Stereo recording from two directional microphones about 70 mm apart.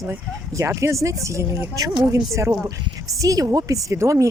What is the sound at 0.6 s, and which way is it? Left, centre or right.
Speech, right.